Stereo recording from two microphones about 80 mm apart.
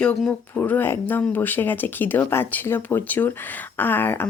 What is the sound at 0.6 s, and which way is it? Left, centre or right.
Speech, left.